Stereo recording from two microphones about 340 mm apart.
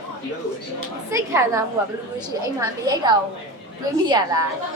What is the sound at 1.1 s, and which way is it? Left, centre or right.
A child's voice, centre.